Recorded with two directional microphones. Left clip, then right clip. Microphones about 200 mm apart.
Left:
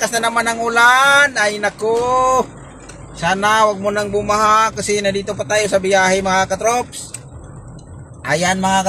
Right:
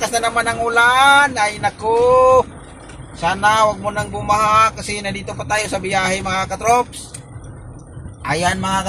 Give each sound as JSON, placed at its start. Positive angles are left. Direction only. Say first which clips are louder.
{"t": 0.0, "sound": "a man's voice", "louder": "left 1 dB", "side_deg": 30}
{"t": 8.3, "sound": "a man's voice", "louder": "left 2 dB", "side_deg": 30}